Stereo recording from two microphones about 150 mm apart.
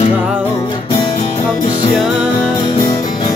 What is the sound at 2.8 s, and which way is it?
Music, 25° left (ahead or behind).